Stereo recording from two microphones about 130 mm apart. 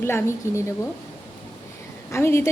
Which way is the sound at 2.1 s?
20° left (ahead or behind).